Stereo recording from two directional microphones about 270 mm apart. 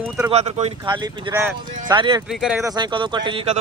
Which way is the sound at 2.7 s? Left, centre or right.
Centre.